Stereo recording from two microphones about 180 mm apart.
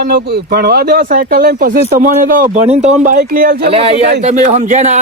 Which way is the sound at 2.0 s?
50° right (ahead or behind).